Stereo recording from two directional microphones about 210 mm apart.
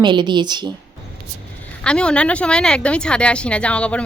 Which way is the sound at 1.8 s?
5° left (ahead or behind).